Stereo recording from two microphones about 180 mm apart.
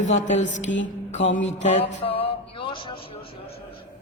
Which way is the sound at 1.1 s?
40° left (ahead or behind).